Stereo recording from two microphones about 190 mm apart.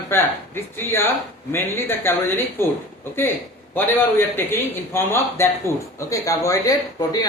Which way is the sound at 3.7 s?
10° left (ahead or behind).